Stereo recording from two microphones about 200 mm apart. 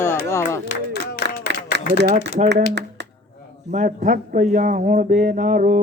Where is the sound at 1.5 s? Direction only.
60° right (ahead or behind).